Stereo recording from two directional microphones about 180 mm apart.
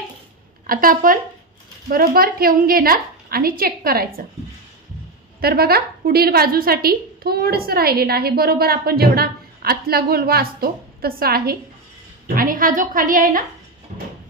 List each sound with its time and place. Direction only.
0.7 s a woman's voice: 50° right (ahead or behind)
5.4 s a woman's voice: 60° right (ahead or behind)